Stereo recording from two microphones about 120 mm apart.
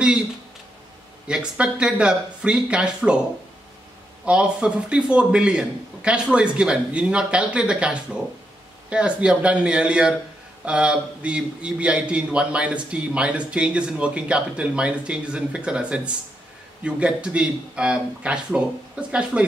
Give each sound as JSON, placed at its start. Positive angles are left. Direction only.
{"t": 1.2, "sound": "a man's voice", "side_deg": -10}
{"t": 4.3, "sound": "a man's voice", "side_deg": -5}